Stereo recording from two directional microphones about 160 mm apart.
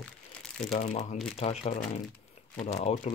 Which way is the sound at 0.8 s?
50° left (ahead or behind).